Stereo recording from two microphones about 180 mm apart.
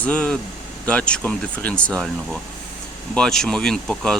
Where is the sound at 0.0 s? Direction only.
5° left (ahead or behind).